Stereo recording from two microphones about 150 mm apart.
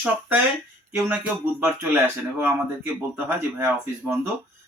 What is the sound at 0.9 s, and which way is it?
Speech, 10° right (ahead or behind).